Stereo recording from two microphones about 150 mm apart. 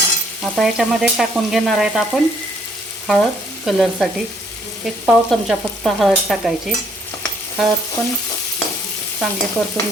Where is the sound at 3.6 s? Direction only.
Centre (ahead or behind).